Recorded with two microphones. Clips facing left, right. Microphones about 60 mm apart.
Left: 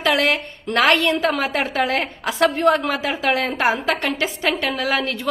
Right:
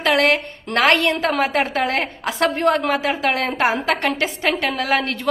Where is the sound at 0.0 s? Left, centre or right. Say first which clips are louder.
Right 2 dB; right.